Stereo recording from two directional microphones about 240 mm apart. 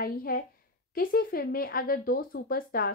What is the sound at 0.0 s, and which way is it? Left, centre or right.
Speech, left.